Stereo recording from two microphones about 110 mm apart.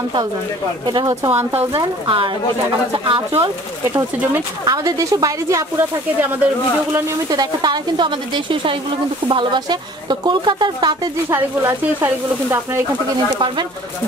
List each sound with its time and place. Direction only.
0.8 s speech: 35° right (ahead or behind)
2.0 s a woman's voice: 50° right (ahead or behind)
3.9 s speech: 20° right (ahead or behind)
4.6 s speech: 35° right (ahead or behind)
5.8 s speech: 20° right (ahead or behind)
7.2 s a woman's voice: 40° right (ahead or behind)
11.2 s speech: 20° right (ahead or behind)